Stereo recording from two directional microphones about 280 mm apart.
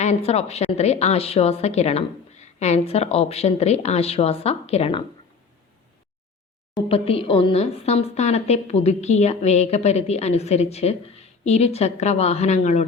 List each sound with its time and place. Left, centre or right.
0.0 s a woman's voice: left
6.7 s a woman's voice: centre